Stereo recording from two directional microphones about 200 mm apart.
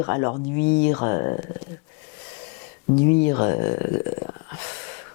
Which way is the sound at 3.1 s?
15° left (ahead or behind).